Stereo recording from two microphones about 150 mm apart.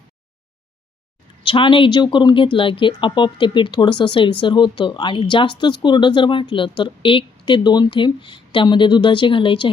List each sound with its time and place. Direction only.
1.5 s speech: 35° left (ahead or behind)